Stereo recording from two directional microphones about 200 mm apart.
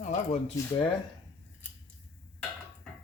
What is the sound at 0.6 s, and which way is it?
Speech, 15° left (ahead or behind).